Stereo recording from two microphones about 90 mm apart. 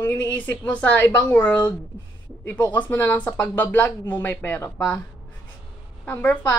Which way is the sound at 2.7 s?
20° left (ahead or behind).